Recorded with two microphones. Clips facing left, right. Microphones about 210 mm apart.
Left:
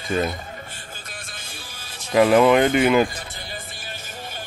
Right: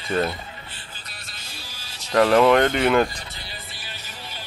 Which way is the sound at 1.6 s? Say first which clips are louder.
Left 2 dB; 50° left (ahead or behind).